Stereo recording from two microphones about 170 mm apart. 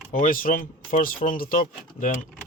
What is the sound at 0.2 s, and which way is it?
Speech, 55° left (ahead or behind).